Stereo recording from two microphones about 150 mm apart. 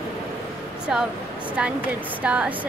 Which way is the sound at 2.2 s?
10° right (ahead or behind).